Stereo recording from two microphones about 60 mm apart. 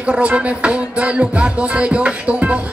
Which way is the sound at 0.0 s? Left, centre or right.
Right.